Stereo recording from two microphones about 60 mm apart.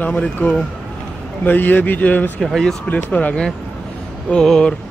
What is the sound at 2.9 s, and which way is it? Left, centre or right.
Speech, left.